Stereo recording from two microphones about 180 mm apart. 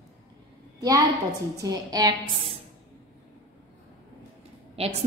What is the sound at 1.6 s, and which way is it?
Music, 20° right (ahead or behind).